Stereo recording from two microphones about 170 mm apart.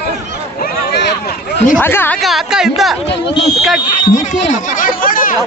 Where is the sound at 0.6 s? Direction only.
80° left.